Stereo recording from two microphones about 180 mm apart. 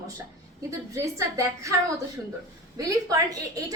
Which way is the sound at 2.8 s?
20° right (ahead or behind).